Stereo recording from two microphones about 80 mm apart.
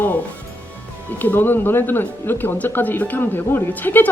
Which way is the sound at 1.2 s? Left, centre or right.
Left.